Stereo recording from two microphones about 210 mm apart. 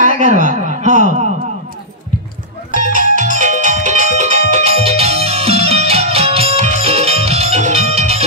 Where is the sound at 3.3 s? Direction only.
35° right (ahead or behind).